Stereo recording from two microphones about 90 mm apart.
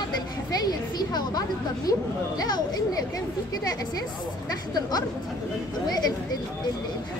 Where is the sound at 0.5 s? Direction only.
50° left (ahead or behind).